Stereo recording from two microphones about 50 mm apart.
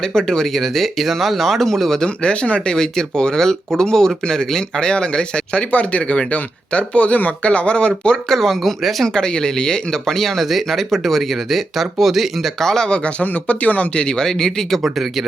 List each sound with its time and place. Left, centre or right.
0.1 s speech: centre
2.0 s speech: centre
8.3 s speech: centre
9.1 s speech: centre
12.5 s speech: centre
13.1 s speech: left
14.3 s speech: centre